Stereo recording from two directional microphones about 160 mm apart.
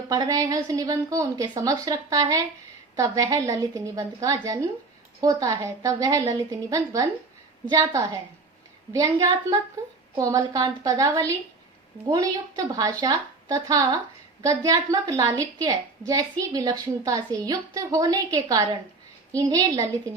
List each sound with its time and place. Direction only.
0.1 s a woman's voice: 25° right (ahead or behind)